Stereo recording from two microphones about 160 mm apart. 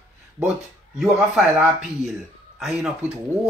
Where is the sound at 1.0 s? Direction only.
Centre (ahead or behind).